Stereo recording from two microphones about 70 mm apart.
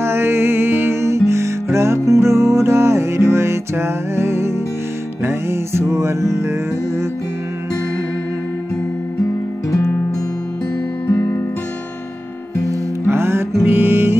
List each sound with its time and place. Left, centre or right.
0.0 s music: right
11.1 s music: left
13.0 s music: right